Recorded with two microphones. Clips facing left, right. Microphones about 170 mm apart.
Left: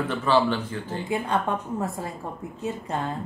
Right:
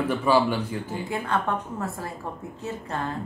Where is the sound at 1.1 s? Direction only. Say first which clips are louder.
Left 2 dB; 15° left (ahead or behind).